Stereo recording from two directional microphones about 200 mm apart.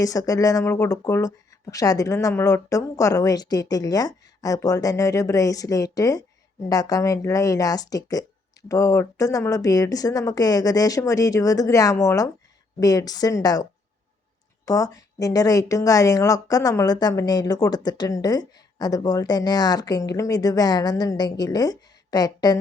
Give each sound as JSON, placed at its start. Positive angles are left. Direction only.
{"t": 0.0, "sound": "a woman's voice", "side_deg": 15}